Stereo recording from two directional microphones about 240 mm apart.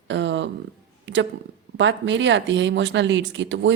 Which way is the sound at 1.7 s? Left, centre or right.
Right.